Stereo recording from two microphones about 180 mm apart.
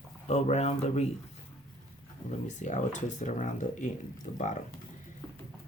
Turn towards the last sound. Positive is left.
turn(degrees=40)  # may be behind; listen again after turning